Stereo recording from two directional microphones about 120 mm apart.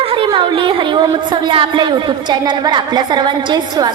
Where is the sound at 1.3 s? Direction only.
45° right (ahead or behind).